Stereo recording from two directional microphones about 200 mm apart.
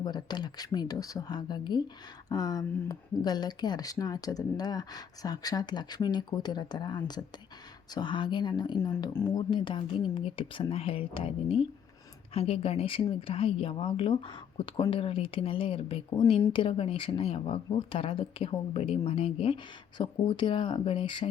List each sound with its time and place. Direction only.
0.0 s speech: 20° left (ahead or behind)
8.8 s speech: 10° left (ahead or behind)